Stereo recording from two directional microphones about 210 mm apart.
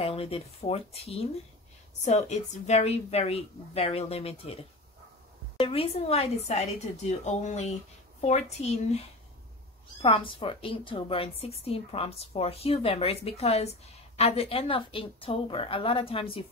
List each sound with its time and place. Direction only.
0.0 s a woman's voice: 25° left (ahead or behind)
10.0 s a woman's voice: 25° left (ahead or behind)